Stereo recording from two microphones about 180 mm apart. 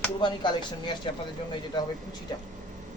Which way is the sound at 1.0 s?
30° left (ahead or behind).